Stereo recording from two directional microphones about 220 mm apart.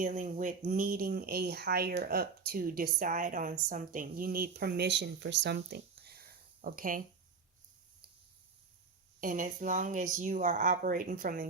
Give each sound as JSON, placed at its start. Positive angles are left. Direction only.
{"t": 0.0, "sound": "speech", "side_deg": -35}
{"t": 9.2, "sound": "speech", "side_deg": -35}